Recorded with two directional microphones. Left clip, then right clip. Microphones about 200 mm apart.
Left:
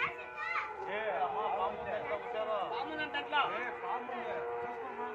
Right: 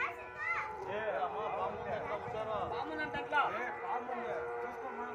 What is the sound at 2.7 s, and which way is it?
Chatter, 40° right (ahead or behind).